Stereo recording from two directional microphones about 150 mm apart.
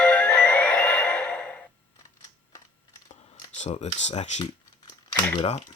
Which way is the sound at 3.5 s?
50° left (ahead or behind).